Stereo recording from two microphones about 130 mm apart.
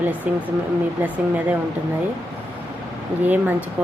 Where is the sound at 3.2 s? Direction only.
15° right (ahead or behind).